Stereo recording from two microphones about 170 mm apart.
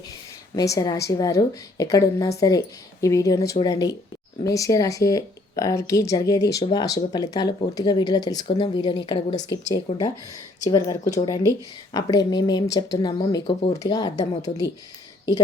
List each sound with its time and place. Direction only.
0.5 s speech: 20° left (ahead or behind)
10.6 s speech: 20° left (ahead or behind)